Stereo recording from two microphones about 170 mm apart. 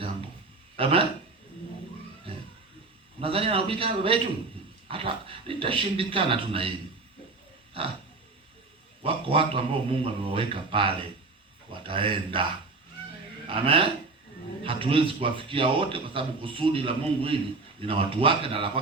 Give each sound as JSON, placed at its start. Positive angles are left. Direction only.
{"t": 0.8, "sound": "a man's voice", "side_deg": -35}
{"t": 2.3, "sound": "music", "side_deg": -30}
{"t": 3.2, "sound": "a man's voice", "side_deg": -35}
{"t": 9.0, "sound": "a man's voice", "side_deg": -30}
{"t": 13.5, "sound": "a man's voice", "side_deg": -30}